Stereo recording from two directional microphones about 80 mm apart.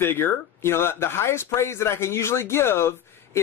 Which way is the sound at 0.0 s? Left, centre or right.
Left.